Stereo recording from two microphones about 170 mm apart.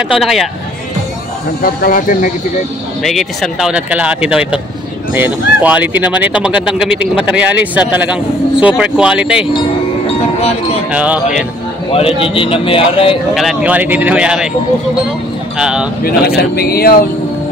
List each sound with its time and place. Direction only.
0.2 s speech: centre (ahead or behind)
1.6 s speech: 60° left (ahead or behind)
3.0 s speech: centre (ahead or behind)
9.5 s music: 30° left (ahead or behind)
10.9 s speech: 10° right (ahead or behind)
11.9 s a man's voice: 35° left (ahead or behind)
13.3 s speech: centre (ahead or behind)
15.5 s speech: 5° right (ahead or behind)
16.0 s a man's voice: 65° left (ahead or behind)